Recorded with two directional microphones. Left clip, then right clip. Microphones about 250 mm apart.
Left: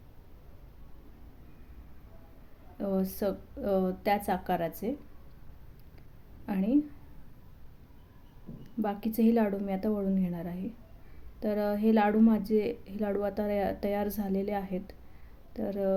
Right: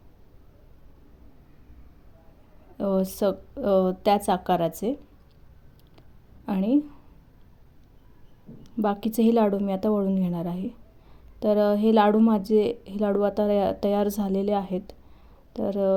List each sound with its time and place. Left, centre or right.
2.7 s a woman's voice: right
6.4 s a sound: right
8.6 s a woman's voice: right